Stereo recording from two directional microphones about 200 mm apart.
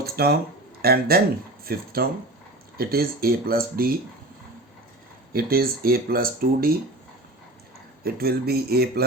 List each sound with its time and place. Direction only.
0.0 s a sound: 50° right (ahead or behind)
0.8 s speech: 50° right (ahead or behind)
5.3 s speech: 50° right (ahead or behind)
8.0 s speech: 50° right (ahead or behind)